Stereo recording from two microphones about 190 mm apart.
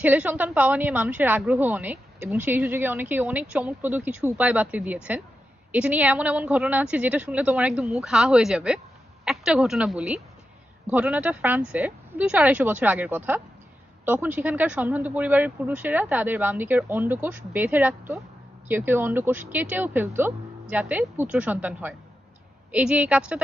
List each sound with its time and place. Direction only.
0.0 s a woman's voice: 10° right (ahead or behind)